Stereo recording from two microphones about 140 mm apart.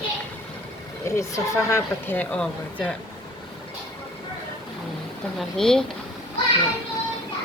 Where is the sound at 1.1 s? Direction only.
20° left (ahead or behind).